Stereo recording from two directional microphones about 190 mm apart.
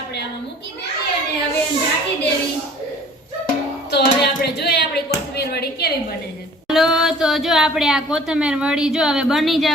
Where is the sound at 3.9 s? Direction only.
60° left (ahead or behind).